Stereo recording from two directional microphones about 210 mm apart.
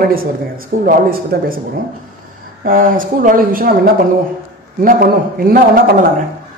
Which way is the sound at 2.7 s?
40° right (ahead or behind).